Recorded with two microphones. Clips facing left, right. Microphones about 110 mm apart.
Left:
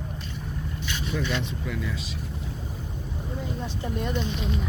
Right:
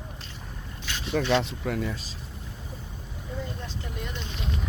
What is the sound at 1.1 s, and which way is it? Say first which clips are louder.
Speech: right 6 dB; 50° right (ahead or behind).